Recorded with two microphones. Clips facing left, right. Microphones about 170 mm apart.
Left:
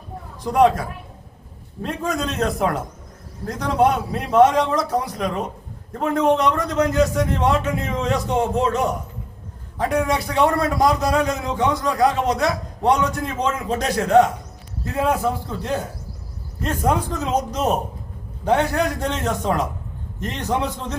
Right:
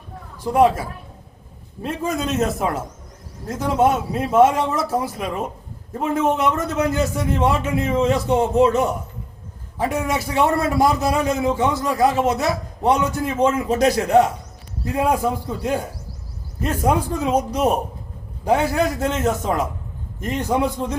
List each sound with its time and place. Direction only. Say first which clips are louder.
1.8 s a man's voice: right 1 dB; 5° right (ahead or behind)